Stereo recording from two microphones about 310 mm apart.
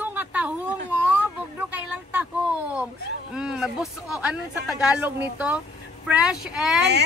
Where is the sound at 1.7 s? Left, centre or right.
Centre.